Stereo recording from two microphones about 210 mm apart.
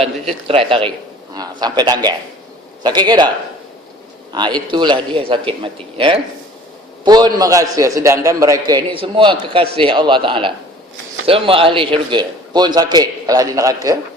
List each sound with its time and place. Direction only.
0.0 s a man's voice: 25° right (ahead or behind)